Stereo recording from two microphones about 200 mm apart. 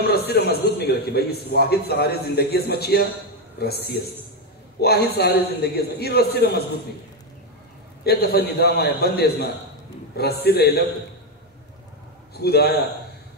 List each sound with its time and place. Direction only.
0.0 s a man's voice: 55° left (ahead or behind)
8.0 s a man's voice: 55° left (ahead or behind)
12.4 s a man's voice: 55° left (ahead or behind)